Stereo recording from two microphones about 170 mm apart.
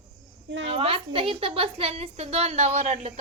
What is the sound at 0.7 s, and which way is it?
A woman's voice, 35° right (ahead or behind).